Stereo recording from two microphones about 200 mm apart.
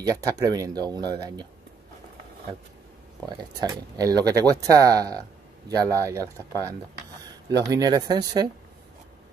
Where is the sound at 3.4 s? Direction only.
20° right (ahead or behind).